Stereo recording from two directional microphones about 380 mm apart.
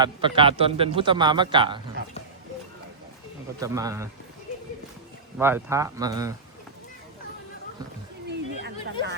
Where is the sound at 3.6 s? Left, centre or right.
Centre.